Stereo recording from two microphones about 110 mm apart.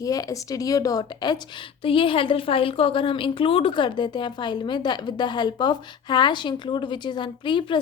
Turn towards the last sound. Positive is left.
turn(degrees=45)  # may be behind; listen again after turning